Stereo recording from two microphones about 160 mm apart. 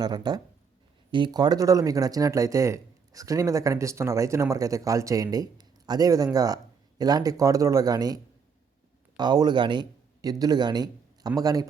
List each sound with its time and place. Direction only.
0.0 s speech: 25° right (ahead or behind)